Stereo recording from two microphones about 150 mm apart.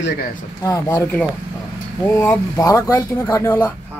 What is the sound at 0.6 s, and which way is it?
Speech, 20° left (ahead or behind).